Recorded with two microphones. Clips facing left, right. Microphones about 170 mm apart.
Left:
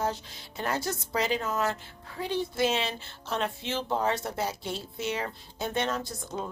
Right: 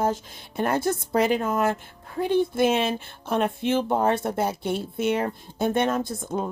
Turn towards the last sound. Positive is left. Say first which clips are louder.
# right 7 dB
turn(degrees=-50)  # may be behind; listen again after turning